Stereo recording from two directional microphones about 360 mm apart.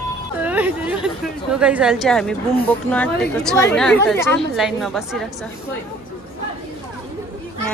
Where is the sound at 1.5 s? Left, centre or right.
Centre.